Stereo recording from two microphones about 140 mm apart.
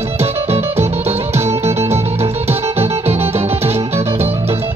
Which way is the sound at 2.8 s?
45° right (ahead or behind).